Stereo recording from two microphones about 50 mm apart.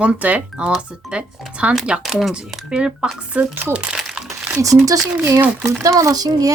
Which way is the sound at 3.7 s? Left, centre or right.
Right.